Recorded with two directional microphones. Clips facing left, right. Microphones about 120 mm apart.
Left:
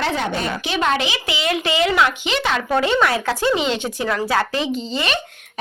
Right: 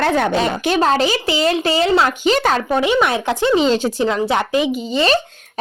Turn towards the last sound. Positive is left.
turn(degrees=-20)  # may be behind; listen again after turning